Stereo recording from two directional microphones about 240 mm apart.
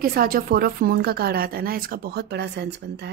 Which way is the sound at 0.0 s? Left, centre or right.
Right.